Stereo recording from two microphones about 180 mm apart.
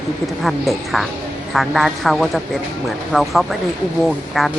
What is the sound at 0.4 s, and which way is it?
A woman's voice, centre (ahead or behind).